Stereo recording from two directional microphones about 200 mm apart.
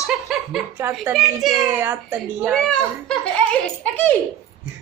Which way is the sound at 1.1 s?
Centre (ahead or behind).